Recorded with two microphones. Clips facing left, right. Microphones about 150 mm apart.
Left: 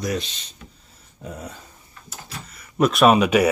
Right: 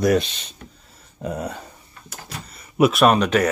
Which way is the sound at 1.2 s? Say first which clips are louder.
Right 8 dB; 65° right (ahead or behind).